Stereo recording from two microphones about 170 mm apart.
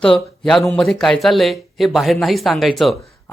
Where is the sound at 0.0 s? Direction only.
5° left (ahead or behind).